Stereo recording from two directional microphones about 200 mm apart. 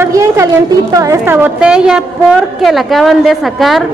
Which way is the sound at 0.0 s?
15° right (ahead or behind).